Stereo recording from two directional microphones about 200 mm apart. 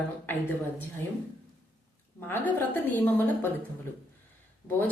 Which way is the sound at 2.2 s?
10° left (ahead or behind).